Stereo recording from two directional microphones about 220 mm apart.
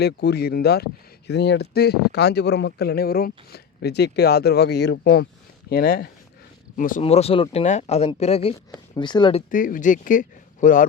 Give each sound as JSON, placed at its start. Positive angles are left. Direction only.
{"t": 0.0, "sound": "speech", "side_deg": 50}
{"t": 7.0, "sound": "speech", "side_deg": 25}
{"t": 9.5, "sound": "speech", "side_deg": 40}